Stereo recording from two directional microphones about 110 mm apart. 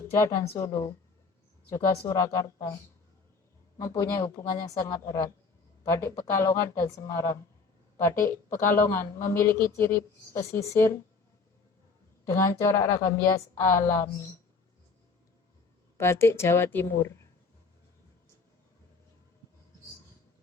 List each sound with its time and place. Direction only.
0.5 s a woman's voice: 30° left (ahead or behind)
3.8 s a woman's voice: 30° left (ahead or behind)
12.2 s a woman's voice: 25° left (ahead or behind)
16.0 s a woman's voice: 20° left (ahead or behind)